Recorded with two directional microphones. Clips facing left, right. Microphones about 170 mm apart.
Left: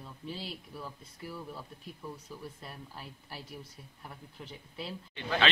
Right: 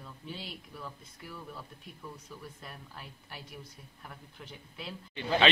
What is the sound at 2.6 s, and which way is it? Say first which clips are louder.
Speech: left 2 dB; 30° left (ahead or behind).